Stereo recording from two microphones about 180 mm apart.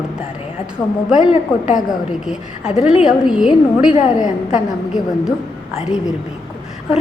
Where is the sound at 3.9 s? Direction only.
45° left (ahead or behind).